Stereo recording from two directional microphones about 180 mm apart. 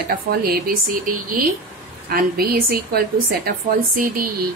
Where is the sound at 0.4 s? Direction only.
55° right (ahead or behind).